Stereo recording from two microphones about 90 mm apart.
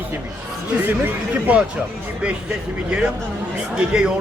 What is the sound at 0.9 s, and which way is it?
Speech, 20° right (ahead or behind).